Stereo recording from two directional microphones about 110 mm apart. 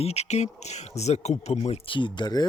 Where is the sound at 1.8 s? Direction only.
45° left (ahead or behind).